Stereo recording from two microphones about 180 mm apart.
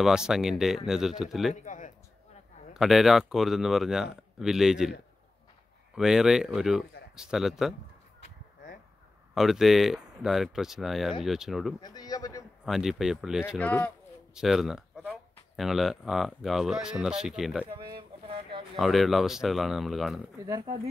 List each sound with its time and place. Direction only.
0.0 s speech: 5° right (ahead or behind)
1.5 s speech: 45° left (ahead or behind)
2.7 s speech: centre (ahead or behind)
5.9 s speech: 5° right (ahead or behind)
9.3 s speech: centre (ahead or behind)
11.8 s speech: 20° left (ahead or behind)
12.6 s speech: centre (ahead or behind)
13.6 s speech: 10° left (ahead or behind)
17.6 s a sound: 25° right (ahead or behind)
18.8 s speech: centre (ahead or behind)